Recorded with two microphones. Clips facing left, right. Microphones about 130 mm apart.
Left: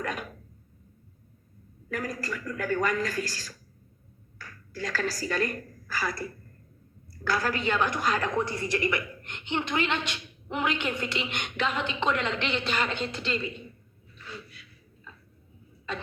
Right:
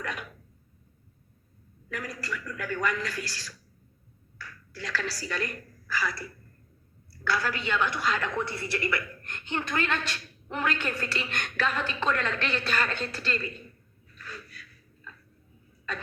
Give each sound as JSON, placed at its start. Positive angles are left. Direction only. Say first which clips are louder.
{"t": 0.0, "sound": "a sound", "louder": "left 3 dB", "side_deg": 40}
{"t": 1.9, "sound": "a man's voice", "louder": "left 3 dB", "side_deg": 45}
{"t": 8.5, "sound": "a woman's voice", "louder": "left 3 dB", "side_deg": 20}
{"t": 14.2, "sound": "snort", "louder": "left 1 dB", "side_deg": 25}
{"t": 15.9, "sound": "cough", "louder": "left 1 dB", "side_deg": 25}